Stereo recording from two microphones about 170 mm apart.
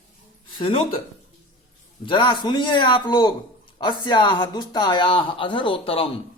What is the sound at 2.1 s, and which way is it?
Speech, 30° left (ahead or behind).